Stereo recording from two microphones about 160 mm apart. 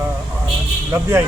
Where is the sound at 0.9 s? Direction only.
15° right (ahead or behind).